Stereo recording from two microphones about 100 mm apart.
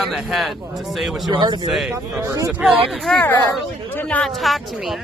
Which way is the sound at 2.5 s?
10° right (ahead or behind).